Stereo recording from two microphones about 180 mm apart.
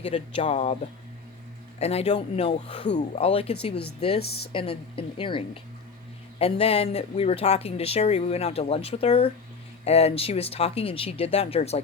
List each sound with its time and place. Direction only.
0.0 s speech: 30° left (ahead or behind)
1.8 s speech: 35° left (ahead or behind)
4.2 s speech: 65° left (ahead or behind)
4.5 s a woman's voice: 30° left (ahead or behind)